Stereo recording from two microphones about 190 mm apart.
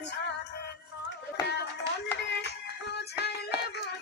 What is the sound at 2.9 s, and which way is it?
Music, 60° left (ahead or behind).